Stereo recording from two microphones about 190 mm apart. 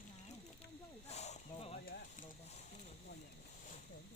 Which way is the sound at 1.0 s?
35° left (ahead or behind).